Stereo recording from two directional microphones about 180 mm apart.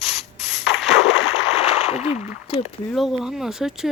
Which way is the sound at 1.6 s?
35° left (ahead or behind).